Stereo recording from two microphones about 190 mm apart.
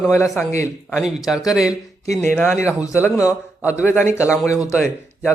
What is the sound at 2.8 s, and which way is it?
Speech, 15° left (ahead or behind).